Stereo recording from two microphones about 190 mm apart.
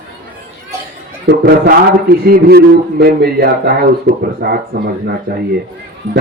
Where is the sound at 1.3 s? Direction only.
60° right (ahead or behind).